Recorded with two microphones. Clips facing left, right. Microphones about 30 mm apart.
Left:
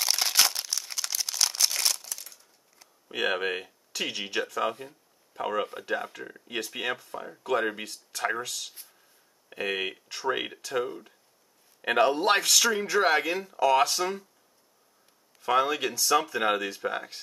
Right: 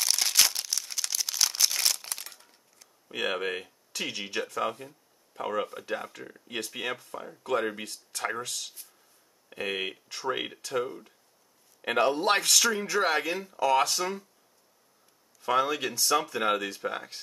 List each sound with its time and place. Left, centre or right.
0.0 s a sound: centre
2.0 s crumpling: right
2.8 s speech: centre
15.4 s speech: centre